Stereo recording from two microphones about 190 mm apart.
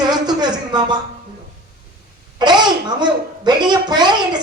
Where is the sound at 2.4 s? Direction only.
25° right (ahead or behind).